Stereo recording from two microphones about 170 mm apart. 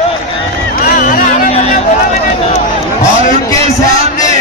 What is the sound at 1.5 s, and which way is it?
Speech, 40° left (ahead or behind).